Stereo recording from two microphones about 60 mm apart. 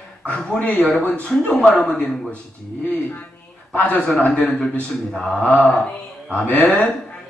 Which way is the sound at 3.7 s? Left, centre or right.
Left.